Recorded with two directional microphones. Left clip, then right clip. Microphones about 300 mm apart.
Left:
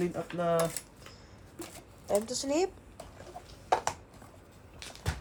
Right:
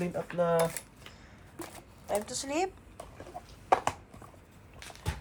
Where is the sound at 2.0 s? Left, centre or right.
Centre.